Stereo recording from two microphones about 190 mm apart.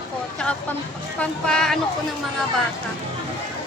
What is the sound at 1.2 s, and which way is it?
Speech, 5° left (ahead or behind).